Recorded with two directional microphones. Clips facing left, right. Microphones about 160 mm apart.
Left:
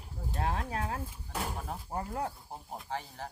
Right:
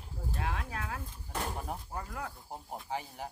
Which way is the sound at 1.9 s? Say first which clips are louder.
Left 5 dB; 30° left (ahead or behind).